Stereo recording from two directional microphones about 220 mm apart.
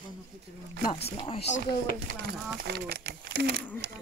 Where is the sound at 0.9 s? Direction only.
25° left (ahead or behind).